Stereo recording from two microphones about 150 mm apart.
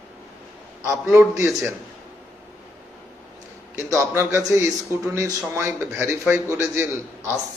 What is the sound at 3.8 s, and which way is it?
Speech, 15° right (ahead or behind).